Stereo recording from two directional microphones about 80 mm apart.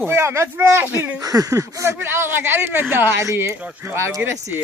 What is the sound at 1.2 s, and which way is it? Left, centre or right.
Speech, right.